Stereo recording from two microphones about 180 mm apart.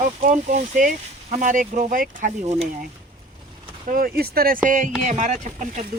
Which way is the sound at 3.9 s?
55° right (ahead or behind).